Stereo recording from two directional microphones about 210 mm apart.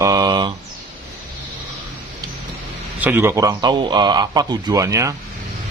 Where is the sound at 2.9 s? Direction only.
10° right (ahead or behind).